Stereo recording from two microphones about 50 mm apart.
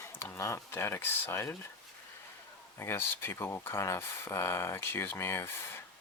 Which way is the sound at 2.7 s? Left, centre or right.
Left.